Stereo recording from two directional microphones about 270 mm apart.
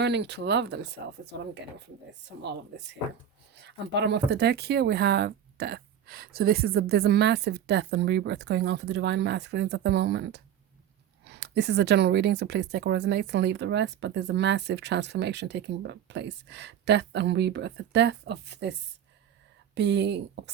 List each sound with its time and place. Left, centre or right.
0.0 s speech: right
2.4 s speech: right